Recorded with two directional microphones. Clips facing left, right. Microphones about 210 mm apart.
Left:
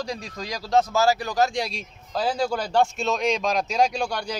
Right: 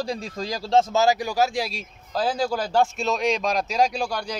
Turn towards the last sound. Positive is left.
turn(degrees=0)  # may be behind; listen again after turning